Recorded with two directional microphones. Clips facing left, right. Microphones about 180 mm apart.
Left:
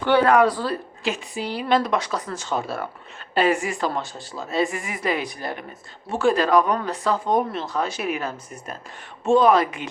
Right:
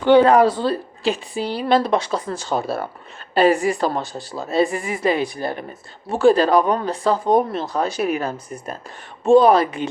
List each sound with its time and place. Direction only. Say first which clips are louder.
0.0 s speech: right 4 dB; 20° right (ahead or behind)